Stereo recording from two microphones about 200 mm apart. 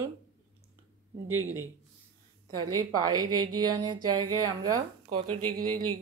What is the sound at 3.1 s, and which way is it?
Speech, 90° right.